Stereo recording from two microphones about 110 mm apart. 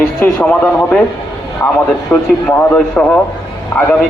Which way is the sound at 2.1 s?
15° left (ahead or behind).